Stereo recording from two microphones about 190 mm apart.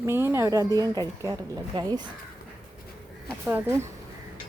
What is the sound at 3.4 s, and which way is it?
Speech, 10° right (ahead or behind).